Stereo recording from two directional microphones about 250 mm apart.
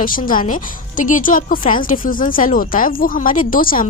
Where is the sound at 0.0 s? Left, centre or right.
Left.